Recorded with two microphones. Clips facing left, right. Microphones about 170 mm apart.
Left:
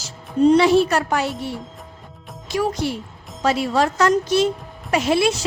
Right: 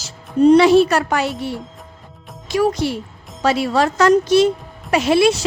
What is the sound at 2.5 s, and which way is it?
A woman's voice, 75° right (ahead or behind).